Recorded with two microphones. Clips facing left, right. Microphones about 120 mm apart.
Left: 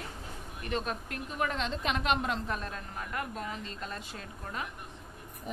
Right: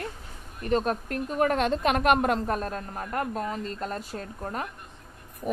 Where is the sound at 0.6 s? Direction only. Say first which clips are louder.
Right 9 dB; 40° right (ahead or behind).